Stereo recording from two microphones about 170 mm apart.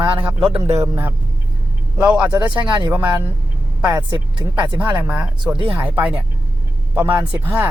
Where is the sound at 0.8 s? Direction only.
15° right (ahead or behind).